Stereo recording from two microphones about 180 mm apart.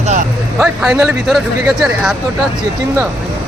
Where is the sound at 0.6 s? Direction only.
5° right (ahead or behind).